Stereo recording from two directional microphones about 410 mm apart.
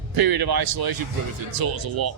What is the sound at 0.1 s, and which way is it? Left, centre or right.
A man's voice, right.